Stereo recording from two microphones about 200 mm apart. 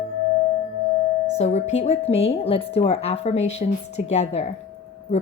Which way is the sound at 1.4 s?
35° left (ahead or behind).